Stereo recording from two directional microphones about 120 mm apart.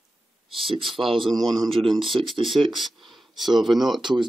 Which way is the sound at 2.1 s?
45° right (ahead or behind).